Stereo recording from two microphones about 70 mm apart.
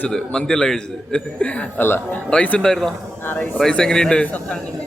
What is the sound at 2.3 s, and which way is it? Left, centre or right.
Speech, centre.